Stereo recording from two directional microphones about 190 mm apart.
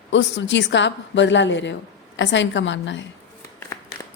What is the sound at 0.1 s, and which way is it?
A woman's voice, 70° left (ahead or behind).